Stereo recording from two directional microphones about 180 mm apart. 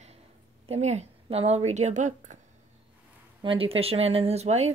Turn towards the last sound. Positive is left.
turn(degrees=-35)  # may be behind; listen again after turning